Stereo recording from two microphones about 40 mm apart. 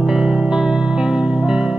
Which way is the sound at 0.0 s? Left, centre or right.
Centre.